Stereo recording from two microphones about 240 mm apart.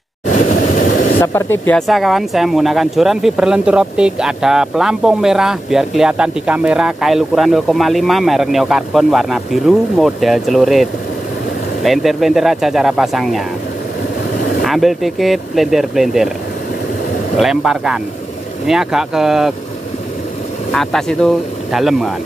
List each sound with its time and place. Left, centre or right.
0.3 s vehicle: left
1.2 s speech: centre
14.6 s speech: centre
17.4 s speech: centre
20.7 s speech: centre